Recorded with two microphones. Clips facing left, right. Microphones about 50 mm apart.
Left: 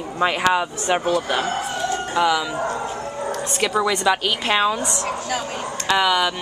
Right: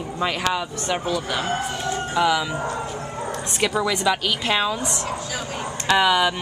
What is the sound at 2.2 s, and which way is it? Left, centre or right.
Speech, centre.